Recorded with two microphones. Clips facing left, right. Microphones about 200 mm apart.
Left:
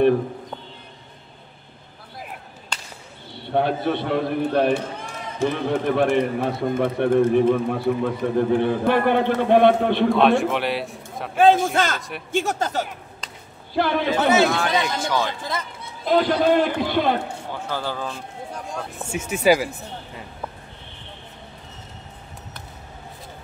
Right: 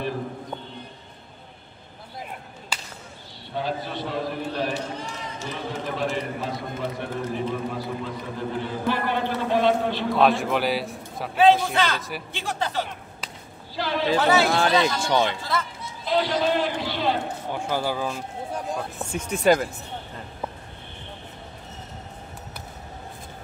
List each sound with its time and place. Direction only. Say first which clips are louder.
2.7 s whip: even; 5° right (ahead or behind)
3.4 s a man's voice: left 8 dB; 60° left (ahead or behind)
10.1 s a man's voice: left 3 dB; centre (ahead or behind)
11.3 s a man's voice: left 2 dB; 45° left (ahead or behind)
13.2 s whip: right 2 dB; 5° right (ahead or behind)
13.7 s a man's voice: left 4 dB; 55° left (ahead or behind)
14.1 s a man's voice: left 2 dB; 20° left (ahead or behind)
14.5 s a man's voice: right 2 dB; 30° right (ahead or behind)
15.8 s speech: left 8 dB; 50° left (ahead or behind)
17.5 s speech: right 4 dB; 15° right (ahead or behind)
19.1 s speech: left 2 dB; 5° left (ahead or behind)